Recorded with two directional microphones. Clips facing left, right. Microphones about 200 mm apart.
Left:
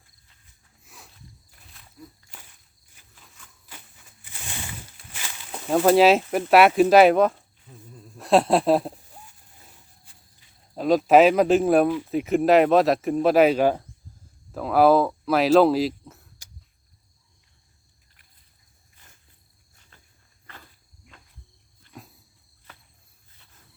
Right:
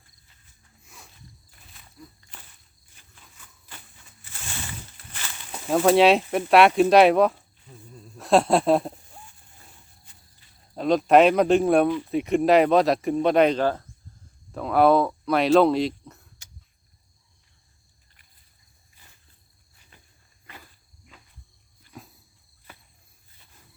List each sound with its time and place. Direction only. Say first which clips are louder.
0.8 s walk: left 1 dB; centre (ahead or behind)
2.9 s a sound: even; 5° left (ahead or behind)
4.2 s a sound: even; 15° left (ahead or behind)
10.8 s speech: left 1 dB; centre (ahead or behind)
19.9 s wild animals: right 2 dB; 15° right (ahead or behind)
20.5 s insect: right 1 dB; 15° right (ahead or behind)
21.1 s cricket: even; centre (ahead or behind)
21.8 s wild animals: even; centre (ahead or behind)